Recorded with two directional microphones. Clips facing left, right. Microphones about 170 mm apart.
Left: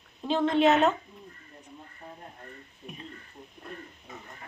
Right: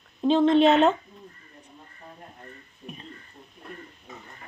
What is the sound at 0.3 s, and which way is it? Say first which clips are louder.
Speech: right 5 dB; 20° right (ahead or behind).